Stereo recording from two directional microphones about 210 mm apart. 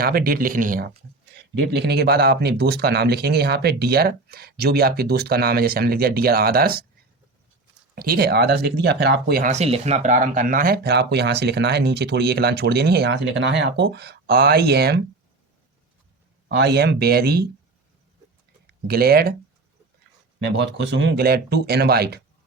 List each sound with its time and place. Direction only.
0.0 s speech: 45° right (ahead or behind)
7.9 s speech: 45° right (ahead or behind)
16.5 s speech: 55° right (ahead or behind)
18.7 s speech: 45° right (ahead or behind)
20.4 s speech: 55° right (ahead or behind)